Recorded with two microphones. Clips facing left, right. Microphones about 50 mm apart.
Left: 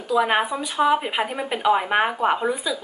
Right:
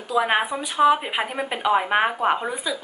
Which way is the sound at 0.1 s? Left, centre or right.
Centre.